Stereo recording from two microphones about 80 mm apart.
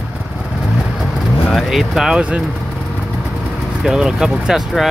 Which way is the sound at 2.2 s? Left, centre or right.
Centre.